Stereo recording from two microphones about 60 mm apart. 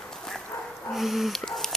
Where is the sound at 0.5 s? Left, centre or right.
Left.